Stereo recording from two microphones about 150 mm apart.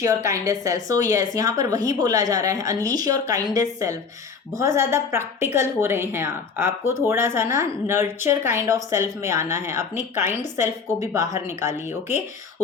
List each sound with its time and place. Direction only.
0.0 s a woman's voice: 20° right (ahead or behind)